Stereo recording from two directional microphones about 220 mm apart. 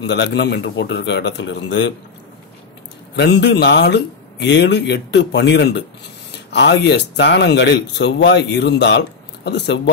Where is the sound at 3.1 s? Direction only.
50° left (ahead or behind).